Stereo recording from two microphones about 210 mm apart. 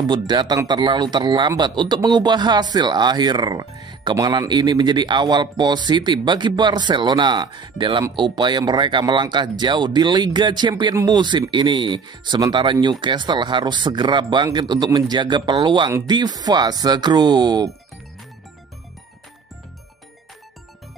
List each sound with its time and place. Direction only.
0.0 s speech: 20° right (ahead or behind)